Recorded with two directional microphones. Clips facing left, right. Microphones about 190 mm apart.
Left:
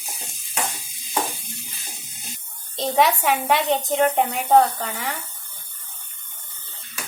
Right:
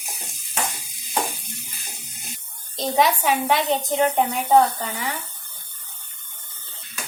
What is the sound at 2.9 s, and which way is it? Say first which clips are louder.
A woman's voice: even; centre (ahead or behind).